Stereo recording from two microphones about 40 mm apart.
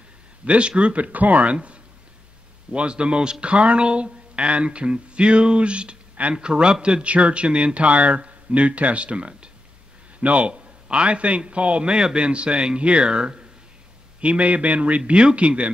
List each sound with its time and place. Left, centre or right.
0.5 s speech: right
11.9 s speech: right